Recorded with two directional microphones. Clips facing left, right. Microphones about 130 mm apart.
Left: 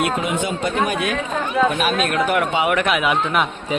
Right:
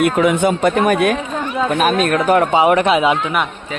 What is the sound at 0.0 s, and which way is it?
Speech, 60° right (ahead or behind).